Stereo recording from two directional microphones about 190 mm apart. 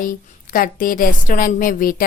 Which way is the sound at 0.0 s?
45° left (ahead or behind).